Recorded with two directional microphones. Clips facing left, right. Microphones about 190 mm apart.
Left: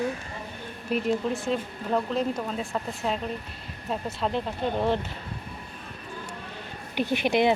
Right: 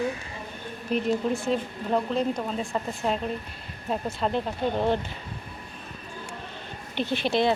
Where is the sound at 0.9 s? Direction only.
Centre (ahead or behind).